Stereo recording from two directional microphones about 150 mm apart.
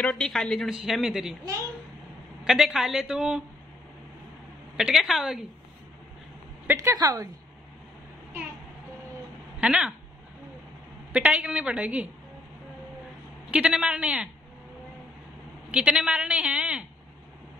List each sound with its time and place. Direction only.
0.0 s a woman's voice: 5° left (ahead or behind)
2.4 s a woman's voice: centre (ahead or behind)
4.7 s a woman's voice: centre (ahead or behind)
6.7 s a woman's voice: 20° right (ahead or behind)
9.6 s speech: 5° right (ahead or behind)
11.1 s a woman's voice: 5° right (ahead or behind)
13.5 s a woman's voice: 5° right (ahead or behind)
15.7 s a woman's voice: 5° right (ahead or behind)